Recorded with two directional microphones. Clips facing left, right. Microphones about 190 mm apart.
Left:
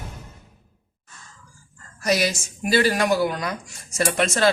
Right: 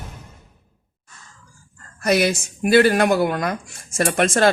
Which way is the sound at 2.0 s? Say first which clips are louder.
Right 4 dB; 55° right (ahead or behind).